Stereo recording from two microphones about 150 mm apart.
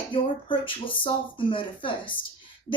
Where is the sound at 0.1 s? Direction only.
35° left (ahead or behind).